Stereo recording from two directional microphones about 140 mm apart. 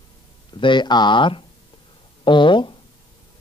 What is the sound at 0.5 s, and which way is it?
A man's voice, 35° left (ahead or behind).